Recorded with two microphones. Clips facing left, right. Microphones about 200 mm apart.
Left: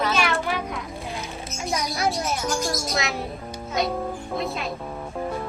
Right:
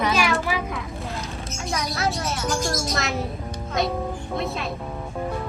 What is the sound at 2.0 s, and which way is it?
Music, 15° left (ahead or behind).